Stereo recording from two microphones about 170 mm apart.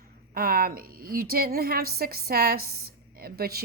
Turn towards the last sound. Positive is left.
turn(degrees=-65)  # may be behind; listen again after turning